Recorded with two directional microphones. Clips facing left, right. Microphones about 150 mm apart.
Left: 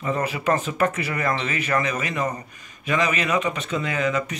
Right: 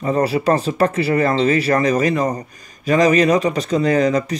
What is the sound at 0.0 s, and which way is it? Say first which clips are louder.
Speech: right 7 dB; 35° right (ahead or behind).